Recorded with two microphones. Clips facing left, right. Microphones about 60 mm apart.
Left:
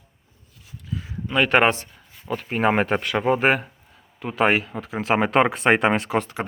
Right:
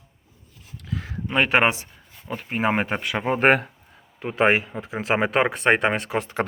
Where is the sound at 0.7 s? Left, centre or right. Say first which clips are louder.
Right 1 dB; right.